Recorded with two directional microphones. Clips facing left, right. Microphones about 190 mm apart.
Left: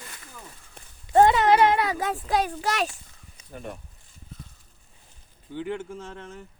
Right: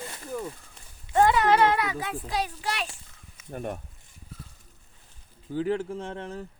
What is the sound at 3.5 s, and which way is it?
Speech, 50° right (ahead or behind).